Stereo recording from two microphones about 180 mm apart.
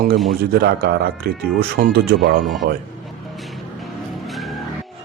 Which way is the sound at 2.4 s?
Centre (ahead or behind).